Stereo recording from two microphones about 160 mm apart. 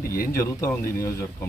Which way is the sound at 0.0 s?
65° left (ahead or behind).